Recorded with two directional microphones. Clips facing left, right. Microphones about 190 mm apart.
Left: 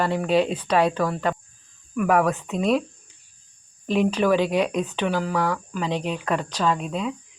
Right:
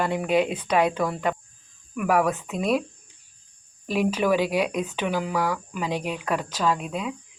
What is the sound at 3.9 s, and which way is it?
Speech, 10° right (ahead or behind).